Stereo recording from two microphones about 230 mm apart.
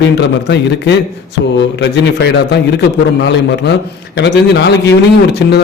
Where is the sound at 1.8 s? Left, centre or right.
Left.